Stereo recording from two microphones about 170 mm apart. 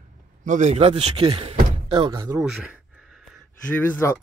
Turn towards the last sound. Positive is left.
turn(degrees=10)  # may be behind; listen again after turning